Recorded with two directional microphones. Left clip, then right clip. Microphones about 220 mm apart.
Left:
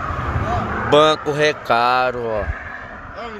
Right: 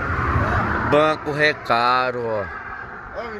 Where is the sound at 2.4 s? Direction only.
45° left (ahead or behind).